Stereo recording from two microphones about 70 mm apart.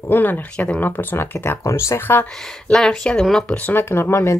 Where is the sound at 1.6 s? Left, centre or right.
Left.